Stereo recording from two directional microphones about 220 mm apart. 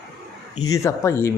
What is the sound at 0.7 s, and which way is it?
Speech, 15° left (ahead or behind).